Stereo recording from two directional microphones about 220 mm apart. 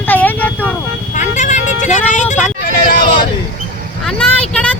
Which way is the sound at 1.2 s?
35° left (ahead or behind).